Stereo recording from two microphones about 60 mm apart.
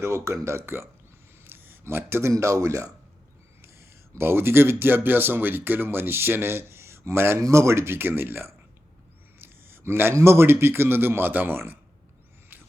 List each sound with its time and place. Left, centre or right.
0.0 s speech: right
1.5 s a sound: right
2.3 s speech: right
3.6 s speech: right
9.4 s a sound: right
10.2 s speech: right